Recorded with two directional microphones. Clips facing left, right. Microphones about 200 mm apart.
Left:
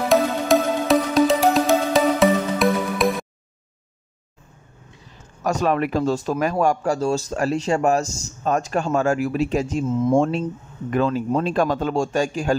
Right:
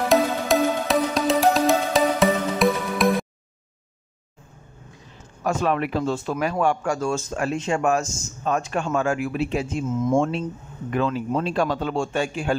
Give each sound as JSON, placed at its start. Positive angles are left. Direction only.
{"t": 0.1, "sound": "music", "side_deg": 0}
{"t": 5.4, "sound": "a man's voice", "side_deg": 40}